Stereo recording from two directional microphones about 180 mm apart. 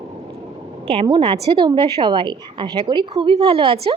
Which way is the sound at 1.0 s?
25° right (ahead or behind).